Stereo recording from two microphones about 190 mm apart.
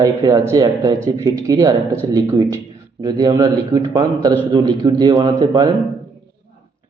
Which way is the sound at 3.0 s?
20° right (ahead or behind).